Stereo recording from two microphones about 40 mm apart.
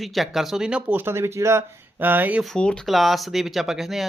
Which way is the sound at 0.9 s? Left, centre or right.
Right.